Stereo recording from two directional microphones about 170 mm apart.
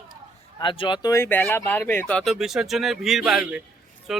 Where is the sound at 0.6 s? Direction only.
30° left (ahead or behind).